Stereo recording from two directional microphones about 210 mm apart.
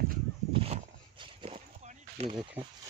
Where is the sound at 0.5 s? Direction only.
25° right (ahead or behind).